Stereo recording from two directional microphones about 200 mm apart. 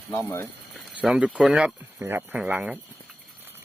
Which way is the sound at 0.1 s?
10° left (ahead or behind).